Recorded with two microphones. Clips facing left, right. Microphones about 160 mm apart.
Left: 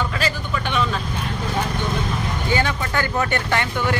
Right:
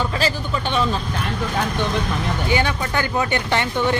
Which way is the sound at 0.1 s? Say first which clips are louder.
Right 2 dB; 30° right (ahead or behind).